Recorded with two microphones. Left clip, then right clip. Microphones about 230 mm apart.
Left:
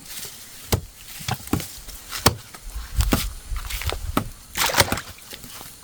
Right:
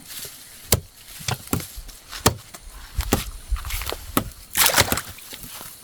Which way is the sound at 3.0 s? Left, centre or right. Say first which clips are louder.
Even; centre.